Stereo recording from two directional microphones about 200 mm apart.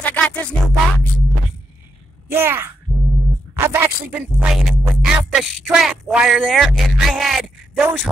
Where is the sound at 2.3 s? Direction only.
10° right (ahead or behind).